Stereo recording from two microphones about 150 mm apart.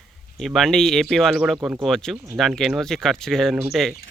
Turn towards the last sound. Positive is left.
turn(degrees=0)  # may be behind; listen again after turning